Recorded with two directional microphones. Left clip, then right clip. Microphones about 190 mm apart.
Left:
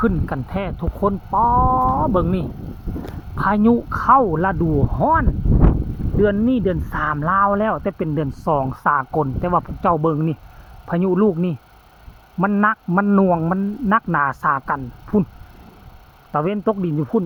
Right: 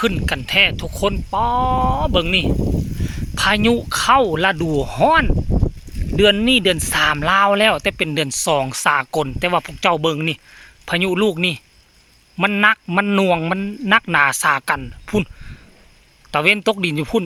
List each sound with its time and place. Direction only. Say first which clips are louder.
0.0 s speech: right 2 dB; 25° right (ahead or behind)
4.1 s speech: even; 20° right (ahead or behind)
16.3 s speech: right 5 dB; 20° right (ahead or behind)